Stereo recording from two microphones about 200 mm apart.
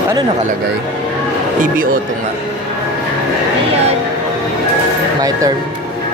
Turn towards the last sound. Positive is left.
turn(degrees=-20)  # may be behind; listen again after turning